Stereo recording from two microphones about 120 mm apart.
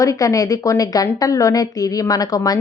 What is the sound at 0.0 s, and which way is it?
A woman's voice, 30° left (ahead or behind).